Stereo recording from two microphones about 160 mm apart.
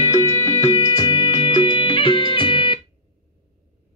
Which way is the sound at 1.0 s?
30° left (ahead or behind).